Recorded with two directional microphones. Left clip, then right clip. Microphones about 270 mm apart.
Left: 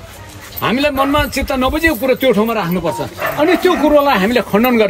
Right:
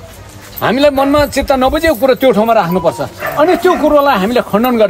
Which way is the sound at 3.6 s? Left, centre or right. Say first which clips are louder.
Right 2 dB; centre.